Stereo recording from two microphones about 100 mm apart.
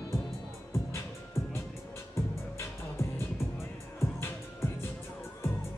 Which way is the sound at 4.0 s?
25° left (ahead or behind).